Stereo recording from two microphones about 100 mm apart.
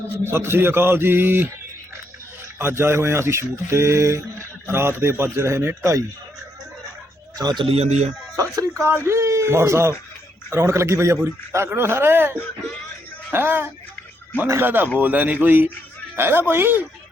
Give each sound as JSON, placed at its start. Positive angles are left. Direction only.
{"t": 0.3, "sound": "speech", "side_deg": -25}
{"t": 2.6, "sound": "speech", "side_deg": -25}
{"t": 7.3, "sound": "a man's voice", "side_deg": -40}
{"t": 7.6, "sound": "a man's voice", "side_deg": -80}
{"t": 8.4, "sound": "speech", "side_deg": -30}